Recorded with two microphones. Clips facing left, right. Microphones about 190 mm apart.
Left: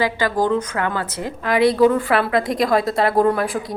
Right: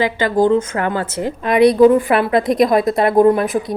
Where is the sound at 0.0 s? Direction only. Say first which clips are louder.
Right 4 dB; 25° right (ahead or behind).